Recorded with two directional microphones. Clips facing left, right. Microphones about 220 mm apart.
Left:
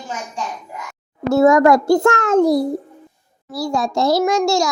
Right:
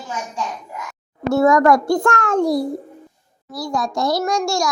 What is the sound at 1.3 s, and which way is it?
A child's voice, 25° left (ahead or behind).